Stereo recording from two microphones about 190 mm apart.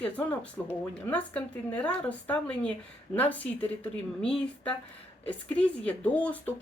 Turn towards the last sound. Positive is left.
turn(degrees=5)  # may be behind; listen again after turning